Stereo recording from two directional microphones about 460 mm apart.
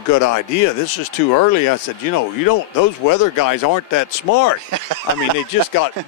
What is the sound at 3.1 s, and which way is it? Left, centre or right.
Speech, left.